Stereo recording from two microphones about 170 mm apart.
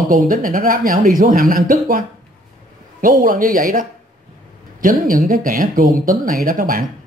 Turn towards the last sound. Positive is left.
turn(degrees=-55)  # may be behind; listen again after turning